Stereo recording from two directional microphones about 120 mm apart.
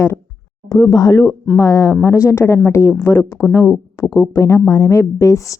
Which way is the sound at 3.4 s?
5° right (ahead or behind).